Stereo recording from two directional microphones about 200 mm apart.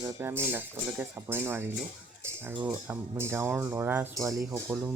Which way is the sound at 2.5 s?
25° right (ahead or behind).